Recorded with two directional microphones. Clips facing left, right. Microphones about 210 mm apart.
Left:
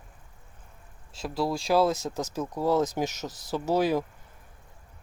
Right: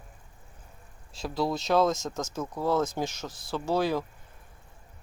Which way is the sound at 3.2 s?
40° left (ahead or behind).